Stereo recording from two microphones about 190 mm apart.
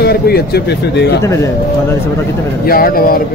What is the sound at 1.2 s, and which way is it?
Speech, 15° left (ahead or behind).